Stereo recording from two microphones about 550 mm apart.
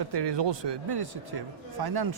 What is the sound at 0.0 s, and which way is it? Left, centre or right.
A man's voice, right.